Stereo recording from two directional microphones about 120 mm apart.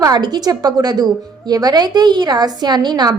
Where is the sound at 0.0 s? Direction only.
35° right (ahead or behind).